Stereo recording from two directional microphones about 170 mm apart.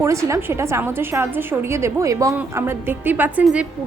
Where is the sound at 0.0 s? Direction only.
15° right (ahead or behind).